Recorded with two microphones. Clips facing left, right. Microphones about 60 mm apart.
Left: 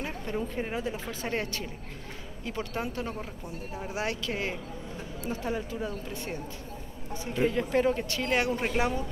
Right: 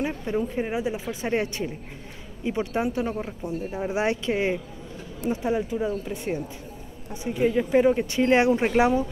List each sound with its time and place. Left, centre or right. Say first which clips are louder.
0.0 s a sound: right 7 dB; centre
0.4 s speech: right 5 dB; centre
3.7 s speech: right 7 dB; right